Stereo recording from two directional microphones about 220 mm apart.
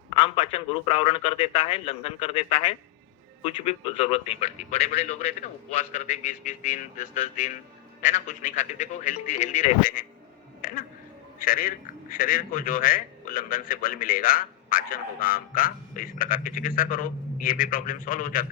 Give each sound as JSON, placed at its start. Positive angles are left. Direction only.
{"t": 0.1, "sound": "a man's voice", "side_deg": 25}